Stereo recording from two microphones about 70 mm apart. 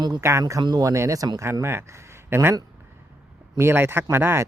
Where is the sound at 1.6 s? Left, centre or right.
Right.